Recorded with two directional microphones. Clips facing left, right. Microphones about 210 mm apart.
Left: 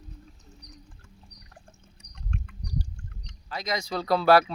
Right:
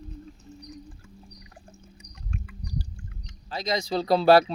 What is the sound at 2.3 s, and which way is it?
Chicken, 5° right (ahead or behind).